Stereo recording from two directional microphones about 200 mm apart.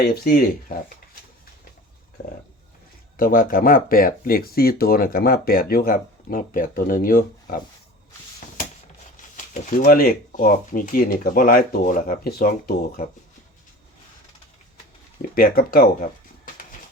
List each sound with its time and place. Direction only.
0.0 s speech: 50° left (ahead or behind)
3.2 s speech: 45° left (ahead or behind)
9.3 s speech: 40° left (ahead or behind)
15.4 s speech: 45° left (ahead or behind)